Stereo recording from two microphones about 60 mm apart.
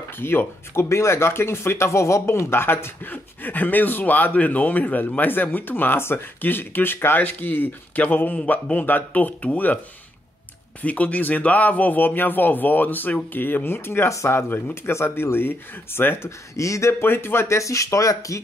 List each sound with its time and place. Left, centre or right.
0.2 s speech: left
0.8 s a man's voice: left
10.8 s a man's voice: left
14.1 s speech: left
16.5 s speech: left
17.0 s speech: left